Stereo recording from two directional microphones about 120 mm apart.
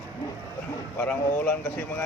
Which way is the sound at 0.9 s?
15° left (ahead or behind).